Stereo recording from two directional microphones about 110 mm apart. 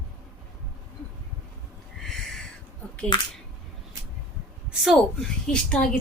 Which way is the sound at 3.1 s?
40° left (ahead or behind).